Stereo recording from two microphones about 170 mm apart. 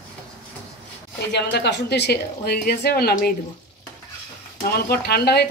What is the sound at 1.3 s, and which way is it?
A woman's voice, 85° left.